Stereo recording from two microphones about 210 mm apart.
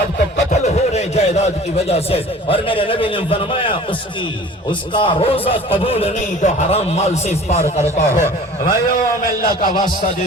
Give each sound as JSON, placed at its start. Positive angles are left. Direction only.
{"t": 0.3, "sound": "a sound", "side_deg": 35}
{"t": 1.9, "sound": "a man's voice", "side_deg": 30}
{"t": 4.9, "sound": "a man's voice", "side_deg": 25}